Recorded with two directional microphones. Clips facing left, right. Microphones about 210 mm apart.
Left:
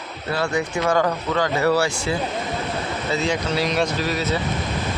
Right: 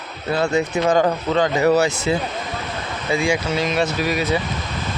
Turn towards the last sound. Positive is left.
turn(degrees=-15)  # may be behind; listen again after turning